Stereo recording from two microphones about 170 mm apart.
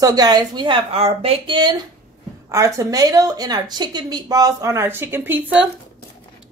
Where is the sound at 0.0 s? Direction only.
25° right (ahead or behind).